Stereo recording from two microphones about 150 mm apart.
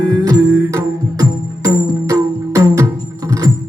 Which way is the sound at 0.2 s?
25° right (ahead or behind).